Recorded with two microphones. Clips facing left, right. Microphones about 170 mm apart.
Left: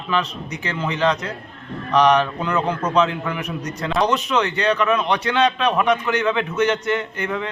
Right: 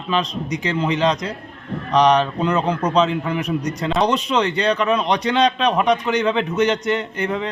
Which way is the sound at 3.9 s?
35° right (ahead or behind).